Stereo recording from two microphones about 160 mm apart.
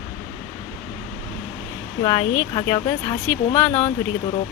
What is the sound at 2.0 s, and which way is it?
Speech, 25° left (ahead or behind).